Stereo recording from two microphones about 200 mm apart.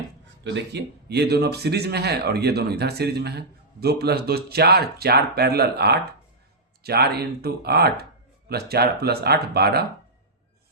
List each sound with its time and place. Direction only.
0.4 s a man's voice: 60° right (ahead or behind)